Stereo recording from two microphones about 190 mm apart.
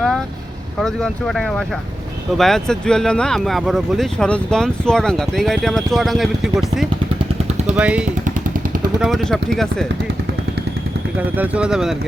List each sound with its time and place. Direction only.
0.8 s speech: 5° left (ahead or behind)
11.2 s speech: 5° right (ahead or behind)